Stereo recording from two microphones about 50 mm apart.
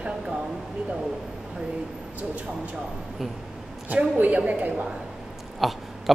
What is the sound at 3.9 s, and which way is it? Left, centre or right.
Speech, right.